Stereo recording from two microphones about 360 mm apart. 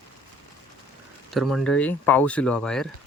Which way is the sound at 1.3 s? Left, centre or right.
Centre.